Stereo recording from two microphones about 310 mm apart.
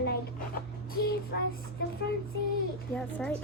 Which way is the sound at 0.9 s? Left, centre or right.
Left.